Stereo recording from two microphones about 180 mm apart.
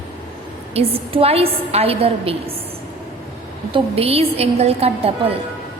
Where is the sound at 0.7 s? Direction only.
35° right (ahead or behind).